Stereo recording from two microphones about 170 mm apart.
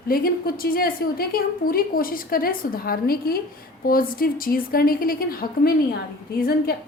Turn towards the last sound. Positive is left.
turn(degrees=65)  # may be behind; listen again after turning